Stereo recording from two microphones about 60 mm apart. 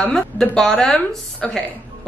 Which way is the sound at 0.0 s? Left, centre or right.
Centre.